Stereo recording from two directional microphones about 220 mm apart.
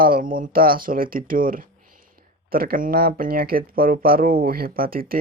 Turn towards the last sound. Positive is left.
turn(degrees=-40)  # may be behind; listen again after turning